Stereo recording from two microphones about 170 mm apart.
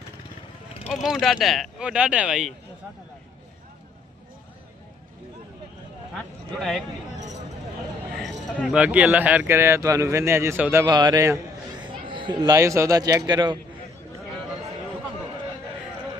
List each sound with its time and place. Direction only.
1.0 s speech: centre (ahead or behind)
6.6 s speech: centre (ahead or behind)
7.2 s a sound: 45° right (ahead or behind)
8.1 s speech: centre (ahead or behind); by 13.6 s 25° right (ahead or behind)